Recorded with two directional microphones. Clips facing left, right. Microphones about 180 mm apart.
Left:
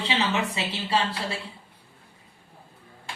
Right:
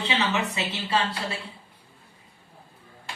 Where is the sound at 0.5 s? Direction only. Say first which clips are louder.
Even; 30° left (ahead or behind).